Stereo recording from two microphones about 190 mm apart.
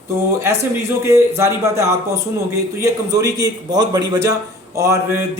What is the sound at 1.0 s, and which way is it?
A man's voice, 15° right (ahead or behind).